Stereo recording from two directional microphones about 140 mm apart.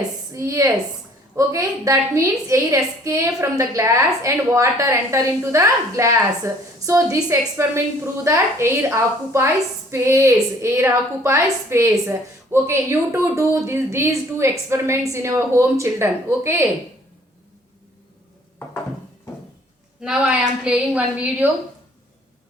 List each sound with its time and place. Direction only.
0.3 s a woman's voice: 20° right (ahead or behind)
20.0 s a woman's voice: 5° right (ahead or behind)